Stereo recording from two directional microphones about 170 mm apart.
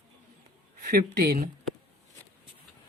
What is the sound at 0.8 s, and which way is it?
Speech, 60° right (ahead or behind).